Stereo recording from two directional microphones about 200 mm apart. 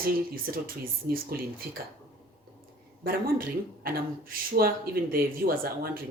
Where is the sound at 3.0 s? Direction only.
45° right (ahead or behind).